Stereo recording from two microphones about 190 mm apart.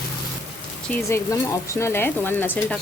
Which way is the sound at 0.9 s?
15° left (ahead or behind).